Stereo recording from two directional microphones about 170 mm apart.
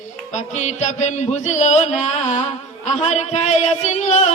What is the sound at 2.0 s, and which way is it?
Music, 40° left (ahead or behind).